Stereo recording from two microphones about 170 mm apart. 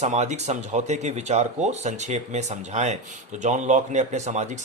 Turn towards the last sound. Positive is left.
turn(degrees=-45)  # may be behind; listen again after turning